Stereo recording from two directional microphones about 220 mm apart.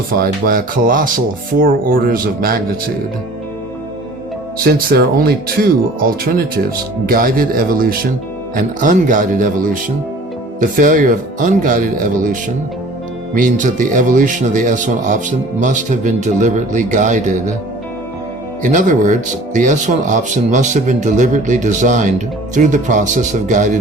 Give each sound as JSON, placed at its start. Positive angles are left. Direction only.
{"t": 0.1, "sound": "speech", "side_deg": -40}
{"t": 4.5, "sound": "speech", "side_deg": -40}
{"t": 10.6, "sound": "speech", "side_deg": -40}
{"t": 18.6, "sound": "speech", "side_deg": -35}